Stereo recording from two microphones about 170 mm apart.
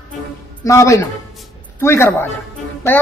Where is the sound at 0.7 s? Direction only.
15° left (ahead or behind).